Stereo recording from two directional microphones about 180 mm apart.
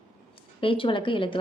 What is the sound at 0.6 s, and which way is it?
Speech, 30° left (ahead or behind).